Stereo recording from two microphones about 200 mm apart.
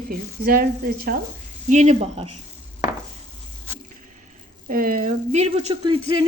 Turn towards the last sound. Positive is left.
turn(degrees=-25)  # may be behind; listen again after turning